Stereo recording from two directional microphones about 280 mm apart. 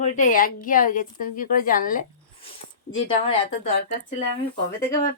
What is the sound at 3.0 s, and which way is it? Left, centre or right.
Speech, centre.